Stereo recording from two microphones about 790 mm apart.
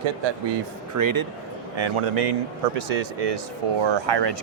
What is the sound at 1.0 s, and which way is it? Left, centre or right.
Speech, right.